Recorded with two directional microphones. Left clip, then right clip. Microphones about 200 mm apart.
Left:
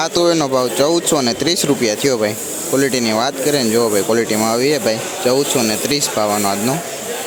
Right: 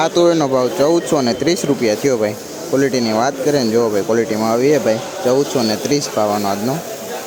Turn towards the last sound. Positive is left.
turn(degrees=-10)  # may be behind; listen again after turning